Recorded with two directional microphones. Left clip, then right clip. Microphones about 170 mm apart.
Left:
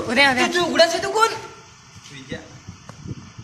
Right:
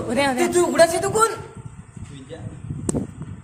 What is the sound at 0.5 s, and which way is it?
Speech, 90° right.